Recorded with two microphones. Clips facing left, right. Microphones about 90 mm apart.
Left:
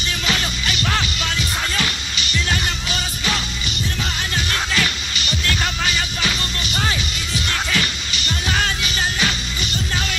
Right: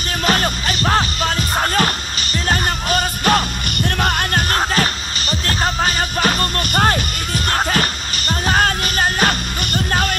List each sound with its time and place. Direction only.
0.3 s music: 45° right (ahead or behind)